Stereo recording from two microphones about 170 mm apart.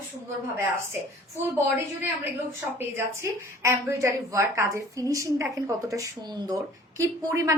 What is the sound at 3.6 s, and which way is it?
A woman's voice, 15° right (ahead or behind).